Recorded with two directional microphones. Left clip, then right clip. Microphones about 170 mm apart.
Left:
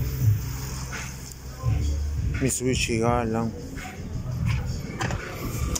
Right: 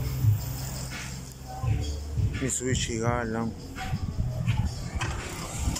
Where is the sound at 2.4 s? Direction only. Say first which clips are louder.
Left 5 dB; 5° left (ahead or behind).